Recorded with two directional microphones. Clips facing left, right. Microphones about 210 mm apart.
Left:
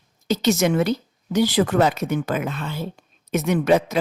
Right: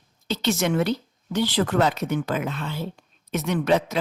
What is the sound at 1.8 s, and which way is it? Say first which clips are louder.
A woman's voice: left 2 dB; 45° left (ahead or behind).